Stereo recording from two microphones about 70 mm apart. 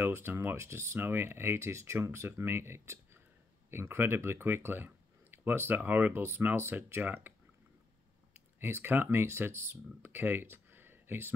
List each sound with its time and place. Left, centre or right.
0.0 s speech: right
6.2 s speech: right
7.0 s speech: right
8.5 s speech: right